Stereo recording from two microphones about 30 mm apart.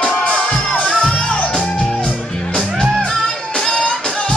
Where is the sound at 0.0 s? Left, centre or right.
Left.